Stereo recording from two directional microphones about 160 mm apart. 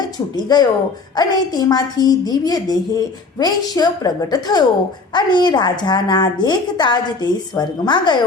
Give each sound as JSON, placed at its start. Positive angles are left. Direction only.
{"t": 0.3, "sound": "a woman's voice", "side_deg": 25}